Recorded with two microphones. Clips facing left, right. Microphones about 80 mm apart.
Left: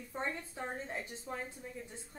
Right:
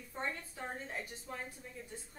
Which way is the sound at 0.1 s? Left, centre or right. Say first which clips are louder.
Left 2 dB; centre.